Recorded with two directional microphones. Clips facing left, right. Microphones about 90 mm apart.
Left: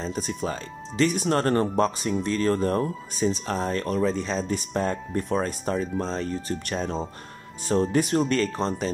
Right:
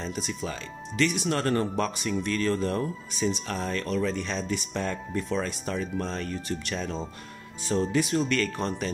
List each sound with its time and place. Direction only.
0.0 s speech: 35° left (ahead or behind)
8.4 s speech: 30° left (ahead or behind)